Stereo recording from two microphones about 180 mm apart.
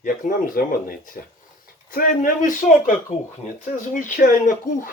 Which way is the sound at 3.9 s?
45° left (ahead or behind).